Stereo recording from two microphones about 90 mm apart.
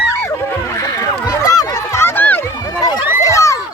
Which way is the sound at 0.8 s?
40° left (ahead or behind).